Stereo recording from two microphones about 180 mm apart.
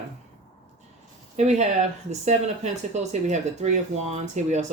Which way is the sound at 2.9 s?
40° right (ahead or behind).